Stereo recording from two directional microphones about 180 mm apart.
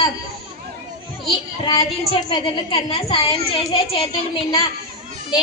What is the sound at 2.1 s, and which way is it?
A woman's voice, 30° left (ahead or behind).